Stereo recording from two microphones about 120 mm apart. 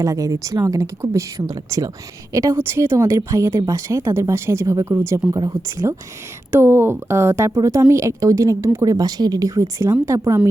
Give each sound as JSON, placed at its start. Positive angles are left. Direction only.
{"t": 0.0, "sound": "a woman's voice", "side_deg": -30}